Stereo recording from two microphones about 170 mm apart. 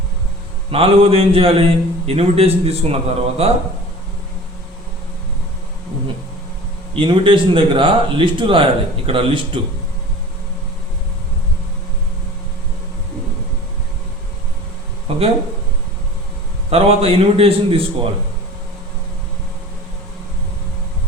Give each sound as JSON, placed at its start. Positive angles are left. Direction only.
{"t": 0.7, "sound": "a man's voice", "side_deg": -35}
{"t": 6.9, "sound": "a man's voice", "side_deg": -30}
{"t": 15.1, "sound": "a sound", "side_deg": -35}
{"t": 16.6, "sound": "a man's voice", "side_deg": -35}